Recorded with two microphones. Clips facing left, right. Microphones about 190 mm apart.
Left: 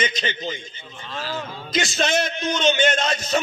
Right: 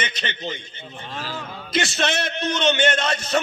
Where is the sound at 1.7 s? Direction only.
60° right (ahead or behind).